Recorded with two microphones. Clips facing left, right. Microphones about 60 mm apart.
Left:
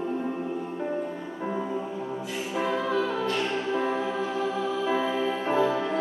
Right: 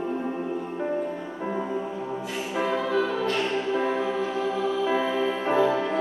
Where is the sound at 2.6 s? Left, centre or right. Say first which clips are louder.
Right 2 dB; right.